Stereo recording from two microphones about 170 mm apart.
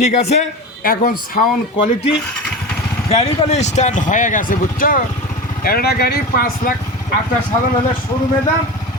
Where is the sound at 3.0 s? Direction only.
40° left (ahead or behind); by 5.0 s 55° left (ahead or behind).